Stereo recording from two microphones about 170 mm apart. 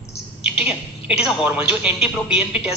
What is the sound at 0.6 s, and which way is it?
A woman's voice, 5° right (ahead or behind).